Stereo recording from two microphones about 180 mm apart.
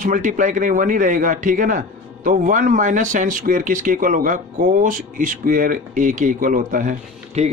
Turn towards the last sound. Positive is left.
turn(degrees=-40)  # may be behind; listen again after turning